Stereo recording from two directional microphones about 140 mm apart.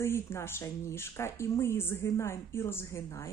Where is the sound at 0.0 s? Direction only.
20° left (ahead or behind).